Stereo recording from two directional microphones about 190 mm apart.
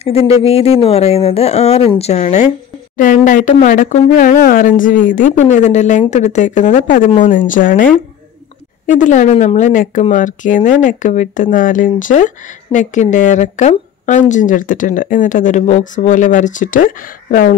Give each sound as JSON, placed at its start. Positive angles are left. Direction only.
{"t": 0.4, "sound": "speech", "side_deg": 30}